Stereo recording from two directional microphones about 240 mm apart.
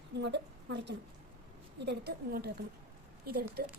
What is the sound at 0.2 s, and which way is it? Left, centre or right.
A woman's voice, right.